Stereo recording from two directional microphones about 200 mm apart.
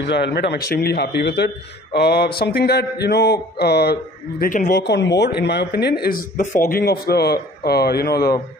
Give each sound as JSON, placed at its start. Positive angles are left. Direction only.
{"t": 0.0, "sound": "mantra", "side_deg": 55}
{"t": 4.7, "sound": "mantra", "side_deg": 60}
{"t": 6.6, "sound": "a man's voice", "side_deg": 50}